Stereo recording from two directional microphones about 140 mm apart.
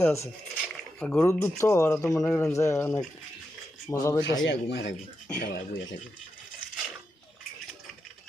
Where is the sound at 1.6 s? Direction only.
20° left (ahead or behind).